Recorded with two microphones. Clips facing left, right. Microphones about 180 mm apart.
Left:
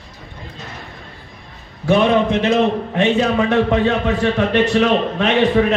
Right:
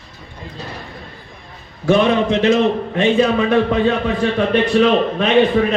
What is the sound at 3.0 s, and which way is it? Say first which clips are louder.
A man's voice: right 1 dB; 70° left (ahead or behind).